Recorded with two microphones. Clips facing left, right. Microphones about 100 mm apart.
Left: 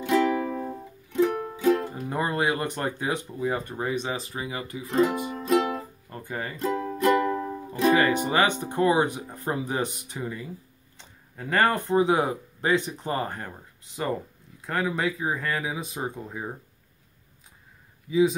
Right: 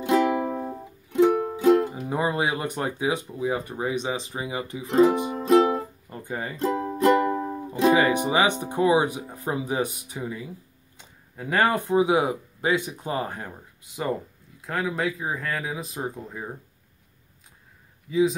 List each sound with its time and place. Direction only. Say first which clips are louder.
0.0 s music: right 1 dB; 20° right (ahead or behind)
1.6 s speech: right 3 dB; 15° right (ahead or behind); by 5.9 s 30° right (ahead or behind)
6.0 s speech: right 1 dB; 15° right (ahead or behind)
6.5 s speech: right 2 dB; 25° right (ahead or behind); by 16.4 s centre (ahead or behind)